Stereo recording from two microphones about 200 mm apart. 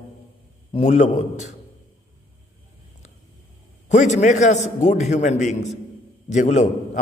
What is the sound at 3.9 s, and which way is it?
A man's voice, 35° left (ahead or behind).